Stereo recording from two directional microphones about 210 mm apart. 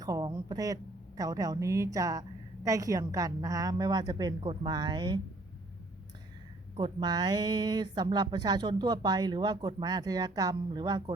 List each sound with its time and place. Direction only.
0.0 s speech: 15° right (ahead or behind)
6.7 s speech: 20° right (ahead or behind)